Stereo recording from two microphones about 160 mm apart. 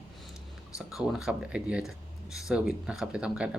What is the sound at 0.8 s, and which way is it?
Speech, 5° right (ahead or behind).